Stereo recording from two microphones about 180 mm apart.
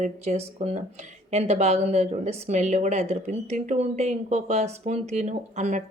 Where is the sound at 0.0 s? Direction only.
40° right (ahead or behind).